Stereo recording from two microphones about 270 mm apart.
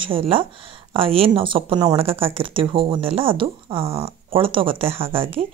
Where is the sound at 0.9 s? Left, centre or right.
Right.